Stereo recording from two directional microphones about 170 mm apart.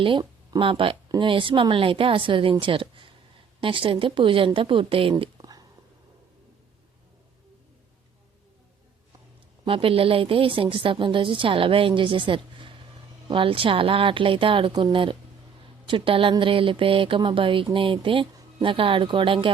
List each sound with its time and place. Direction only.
0.0 s speech: 25° right (ahead or behind)
9.6 s speech: 30° right (ahead or behind)